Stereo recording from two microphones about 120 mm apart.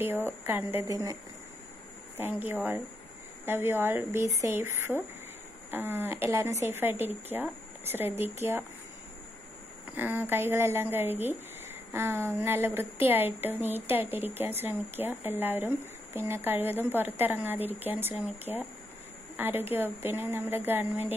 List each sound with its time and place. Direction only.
0.0 s a woman's voice: 20° right (ahead or behind)
2.1 s a woman's voice: 15° right (ahead or behind)
9.8 s a woman's voice: 15° right (ahead or behind)